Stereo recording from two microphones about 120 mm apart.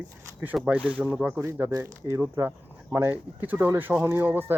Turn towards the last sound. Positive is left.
turn(degrees=-15)  # may be behind; listen again after turning